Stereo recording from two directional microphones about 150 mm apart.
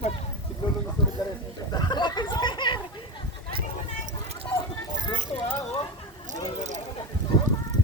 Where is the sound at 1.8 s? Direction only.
30° left (ahead or behind).